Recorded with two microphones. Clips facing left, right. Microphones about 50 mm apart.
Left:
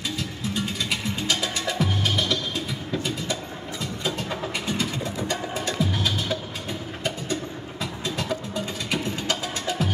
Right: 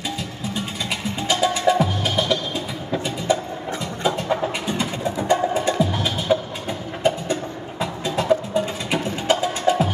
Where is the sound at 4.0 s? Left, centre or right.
Right.